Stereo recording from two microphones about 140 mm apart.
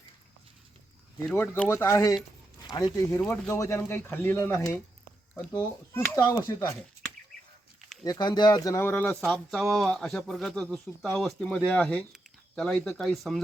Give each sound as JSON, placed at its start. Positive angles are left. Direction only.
{"t": 1.3, "sound": "speech", "side_deg": 15}
{"t": 3.2, "sound": "speech", "side_deg": 10}
{"t": 3.5, "sound": "speech", "side_deg": 20}
{"t": 8.0, "sound": "speech", "side_deg": 30}
{"t": 9.0, "sound": "speech", "side_deg": 5}